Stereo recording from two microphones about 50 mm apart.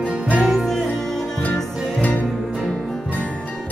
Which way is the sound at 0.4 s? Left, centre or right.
Centre.